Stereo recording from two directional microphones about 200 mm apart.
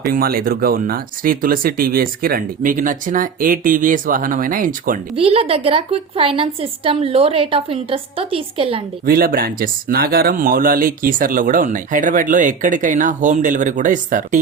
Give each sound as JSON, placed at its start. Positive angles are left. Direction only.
{"t": 0.1, "sound": "speech", "side_deg": -45}
{"t": 5.1, "sound": "a woman's voice", "side_deg": -30}
{"t": 9.0, "sound": "speech", "side_deg": -45}